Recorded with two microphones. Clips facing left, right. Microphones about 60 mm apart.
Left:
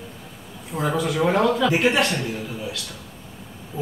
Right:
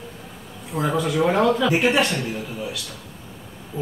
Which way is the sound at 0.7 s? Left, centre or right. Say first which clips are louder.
Right 1 dB; centre.